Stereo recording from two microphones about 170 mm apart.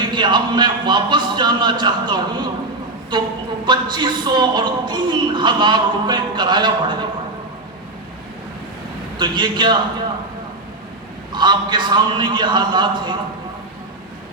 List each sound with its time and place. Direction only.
0.0 s speech: 25° right (ahead or behind)
9.1 s speech: 25° right (ahead or behind)
11.3 s speech: 25° right (ahead or behind)